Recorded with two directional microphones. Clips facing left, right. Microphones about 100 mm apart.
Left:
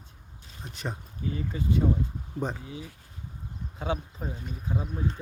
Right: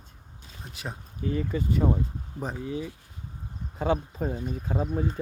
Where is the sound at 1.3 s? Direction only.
55° right (ahead or behind).